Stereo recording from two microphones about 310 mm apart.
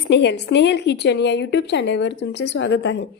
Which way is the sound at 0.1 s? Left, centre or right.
Left.